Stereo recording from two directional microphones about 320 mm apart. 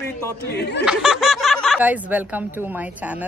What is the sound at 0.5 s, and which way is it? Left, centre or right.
Speech, left.